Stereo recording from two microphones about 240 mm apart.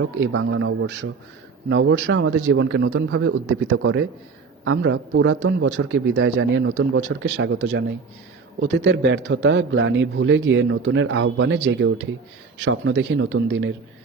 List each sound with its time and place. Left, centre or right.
0.0 s a man's voice: right